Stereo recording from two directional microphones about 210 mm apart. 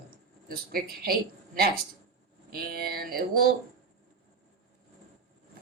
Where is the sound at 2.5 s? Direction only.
45° right (ahead or behind).